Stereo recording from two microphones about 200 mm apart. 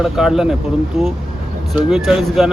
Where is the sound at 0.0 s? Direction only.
Centre (ahead or behind).